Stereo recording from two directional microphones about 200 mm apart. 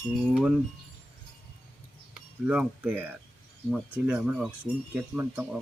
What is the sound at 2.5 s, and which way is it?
Speech, 5° right (ahead or behind).